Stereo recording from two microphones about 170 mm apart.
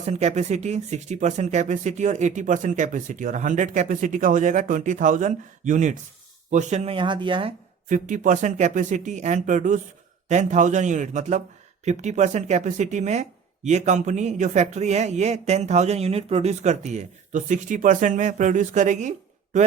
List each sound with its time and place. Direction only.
0.0 s speech: 40° right (ahead or behind)
6.9 s speech: 30° right (ahead or behind)
7.9 s speech: 50° right (ahead or behind)